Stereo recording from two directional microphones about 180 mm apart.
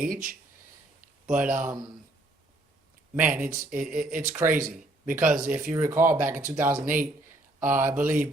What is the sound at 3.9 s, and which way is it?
Speech, 5° right (ahead or behind).